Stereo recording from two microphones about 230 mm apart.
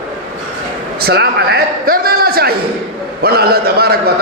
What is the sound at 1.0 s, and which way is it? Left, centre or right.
A man's voice, right.